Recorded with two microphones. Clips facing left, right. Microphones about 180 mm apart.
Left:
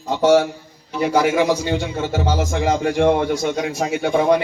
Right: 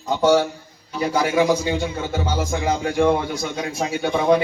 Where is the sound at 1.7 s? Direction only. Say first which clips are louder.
Left 2 dB; 70° left (ahead or behind).